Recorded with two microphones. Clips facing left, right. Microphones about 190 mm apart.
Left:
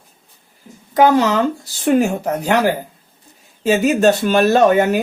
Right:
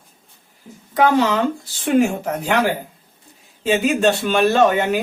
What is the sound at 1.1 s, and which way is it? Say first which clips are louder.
Speech: left 2 dB; 40° left (ahead or behind).